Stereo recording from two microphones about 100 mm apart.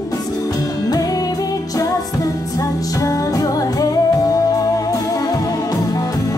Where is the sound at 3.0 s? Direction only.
35° left (ahead or behind).